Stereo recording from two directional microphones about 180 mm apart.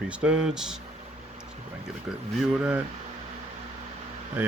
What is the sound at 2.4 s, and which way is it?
Speech, 5° right (ahead or behind).